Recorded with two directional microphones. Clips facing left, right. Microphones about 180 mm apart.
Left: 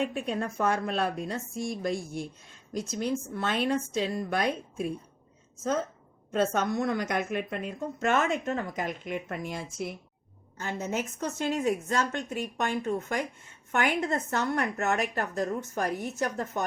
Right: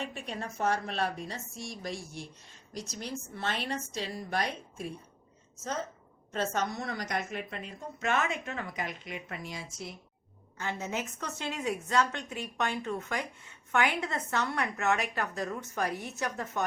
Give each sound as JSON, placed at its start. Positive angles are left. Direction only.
{"t": 0.0, "sound": "a woman's voice", "side_deg": 55}
{"t": 10.6, "sound": "a woman's voice", "side_deg": 45}